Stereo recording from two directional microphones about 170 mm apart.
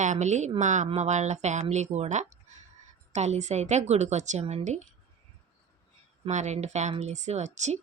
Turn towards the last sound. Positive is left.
turn(degrees=-45)  # may be behind; listen again after turning